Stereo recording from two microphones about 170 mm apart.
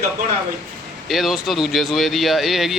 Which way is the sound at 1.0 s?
Centre (ahead or behind).